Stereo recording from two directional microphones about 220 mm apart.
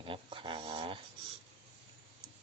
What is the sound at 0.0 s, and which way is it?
Dog, 25° right (ahead or behind).